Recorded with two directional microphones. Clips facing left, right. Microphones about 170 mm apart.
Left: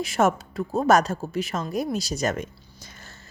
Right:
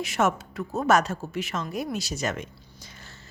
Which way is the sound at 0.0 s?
35° left (ahead or behind).